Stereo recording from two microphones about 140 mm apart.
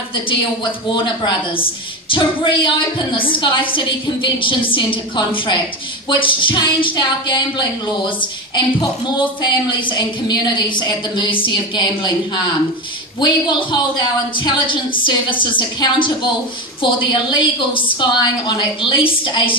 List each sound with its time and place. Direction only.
0.1 s a woman's voice: 35° left (ahead or behind)
13.2 s a woman's voice: 35° left (ahead or behind)